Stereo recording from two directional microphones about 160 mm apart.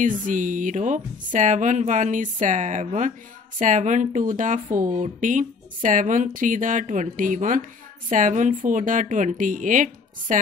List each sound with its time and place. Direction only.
0.0 s speech: 55° right (ahead or behind)